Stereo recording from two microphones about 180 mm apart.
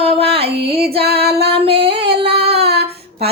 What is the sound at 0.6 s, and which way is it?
Female singing, 30° right (ahead or behind).